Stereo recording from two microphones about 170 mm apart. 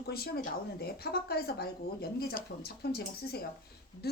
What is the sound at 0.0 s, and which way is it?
Speech, 65° left (ahead or behind).